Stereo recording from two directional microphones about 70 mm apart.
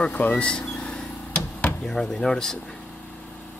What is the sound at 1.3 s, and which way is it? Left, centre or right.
Knock, left.